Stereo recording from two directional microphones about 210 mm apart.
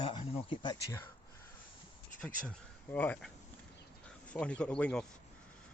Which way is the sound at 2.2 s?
5° left (ahead or behind).